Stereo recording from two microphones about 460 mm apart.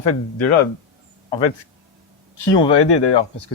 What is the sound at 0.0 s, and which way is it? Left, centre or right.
Speech, left.